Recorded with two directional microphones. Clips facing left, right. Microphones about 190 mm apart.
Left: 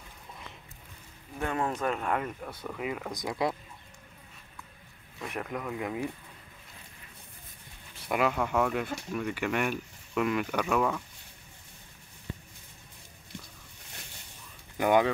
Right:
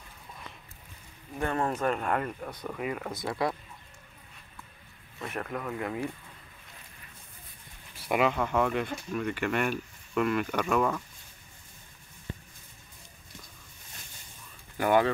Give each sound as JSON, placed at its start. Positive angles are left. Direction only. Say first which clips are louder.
{"t": 1.4, "sound": "speech", "louder": "right 2 dB", "side_deg": 5}
{"t": 3.2, "sound": "speech", "louder": "even", "side_deg": 20}
{"t": 5.3, "sound": "speech", "louder": "even", "side_deg": 10}
{"t": 8.1, "sound": "speech", "louder": "right 1 dB", "side_deg": 0}
{"t": 14.8, "sound": "speech", "louder": "even", "side_deg": 15}